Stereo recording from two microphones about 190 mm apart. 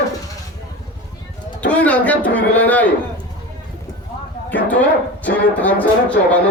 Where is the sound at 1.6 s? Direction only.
5° left (ahead or behind).